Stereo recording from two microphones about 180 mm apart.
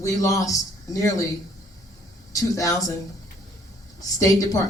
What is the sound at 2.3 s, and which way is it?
Speech, 20° left (ahead or behind).